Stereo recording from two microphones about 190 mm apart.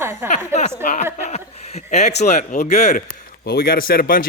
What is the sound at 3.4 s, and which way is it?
Speech, 55° left (ahead or behind).